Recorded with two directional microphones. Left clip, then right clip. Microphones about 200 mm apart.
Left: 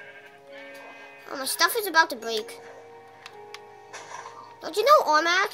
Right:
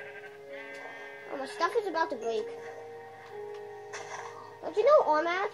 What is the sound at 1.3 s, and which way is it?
A child's voice, 55° left (ahead or behind).